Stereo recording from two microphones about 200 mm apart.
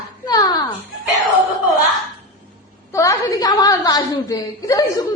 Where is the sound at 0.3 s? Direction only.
20° left (ahead or behind).